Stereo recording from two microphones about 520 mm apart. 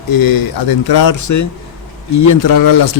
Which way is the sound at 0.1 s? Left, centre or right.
Left.